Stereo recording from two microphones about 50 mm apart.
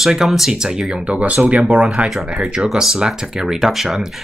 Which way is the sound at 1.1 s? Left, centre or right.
Right.